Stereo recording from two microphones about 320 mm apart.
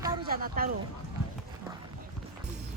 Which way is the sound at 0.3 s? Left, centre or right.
Right.